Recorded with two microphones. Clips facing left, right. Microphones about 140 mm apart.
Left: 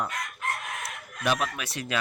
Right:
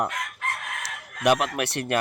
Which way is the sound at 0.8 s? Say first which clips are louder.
Right 8 dB; 75° right (ahead or behind).